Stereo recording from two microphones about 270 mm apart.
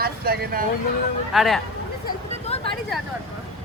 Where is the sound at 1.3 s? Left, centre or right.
Centre.